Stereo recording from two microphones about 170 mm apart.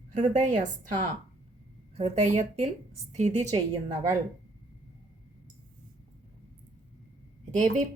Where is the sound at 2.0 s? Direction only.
40° right (ahead or behind).